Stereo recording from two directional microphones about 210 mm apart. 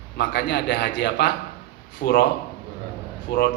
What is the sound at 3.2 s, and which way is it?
Speech, 50° left (ahead or behind).